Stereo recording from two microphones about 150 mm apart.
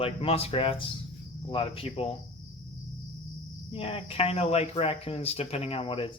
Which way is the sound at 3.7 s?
40° left (ahead or behind).